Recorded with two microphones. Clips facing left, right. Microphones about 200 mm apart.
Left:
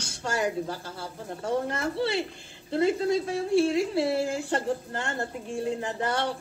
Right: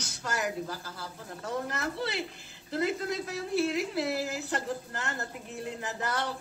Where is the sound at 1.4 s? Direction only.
25° left (ahead or behind).